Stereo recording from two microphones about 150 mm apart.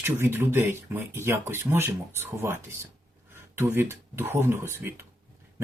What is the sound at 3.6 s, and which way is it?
Speech, 20° right (ahead or behind).